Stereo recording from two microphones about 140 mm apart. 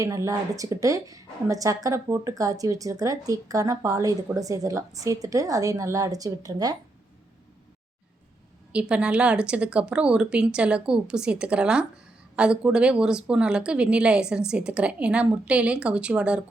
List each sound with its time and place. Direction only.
0.0 s a woman's voice: 20° right (ahead or behind)
8.7 s a woman's voice: 10° right (ahead or behind)